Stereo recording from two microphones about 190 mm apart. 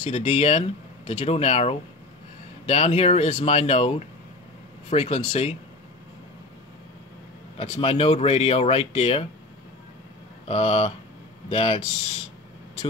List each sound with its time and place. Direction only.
0.0 s speech: 35° left (ahead or behind)
7.5 s speech: 35° left (ahead or behind)
10.5 s speech: 30° left (ahead or behind)